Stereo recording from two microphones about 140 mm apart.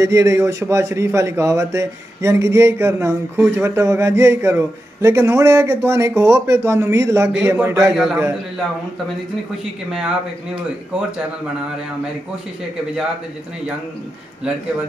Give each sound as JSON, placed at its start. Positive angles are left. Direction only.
{"t": 0.0, "sound": "a man's voice", "side_deg": -20}
{"t": 7.9, "sound": "a man's voice", "side_deg": 0}
{"t": 9.8, "sound": "a man's voice", "side_deg": -5}